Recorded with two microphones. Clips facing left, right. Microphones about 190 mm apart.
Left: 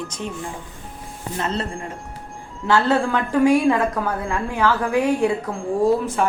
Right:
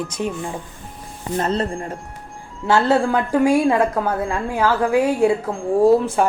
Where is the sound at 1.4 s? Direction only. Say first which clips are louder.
Right 4 dB; 40° right (ahead or behind).